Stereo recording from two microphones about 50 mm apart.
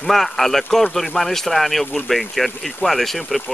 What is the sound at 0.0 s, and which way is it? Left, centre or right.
Speech, centre.